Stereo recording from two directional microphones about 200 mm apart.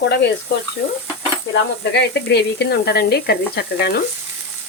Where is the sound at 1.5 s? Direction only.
60° left (ahead or behind).